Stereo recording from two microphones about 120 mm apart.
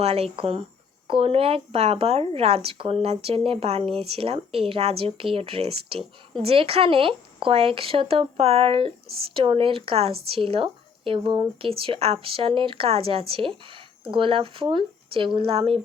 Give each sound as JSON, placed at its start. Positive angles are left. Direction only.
{"t": 0.0, "sound": "speech", "side_deg": -55}